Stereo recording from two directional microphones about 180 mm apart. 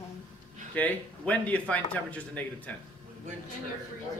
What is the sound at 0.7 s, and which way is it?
Speech, 10° left (ahead or behind).